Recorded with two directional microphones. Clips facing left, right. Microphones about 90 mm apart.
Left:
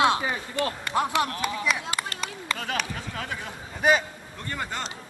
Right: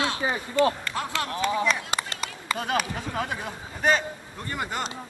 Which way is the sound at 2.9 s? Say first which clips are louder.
Right 4 dB; 25° right (ahead or behind).